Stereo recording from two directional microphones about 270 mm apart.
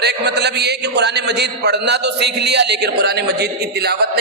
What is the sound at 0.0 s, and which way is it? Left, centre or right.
A man's voice, right.